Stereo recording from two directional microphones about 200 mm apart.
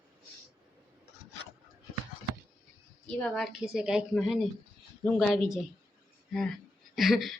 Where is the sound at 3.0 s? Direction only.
5° left (ahead or behind).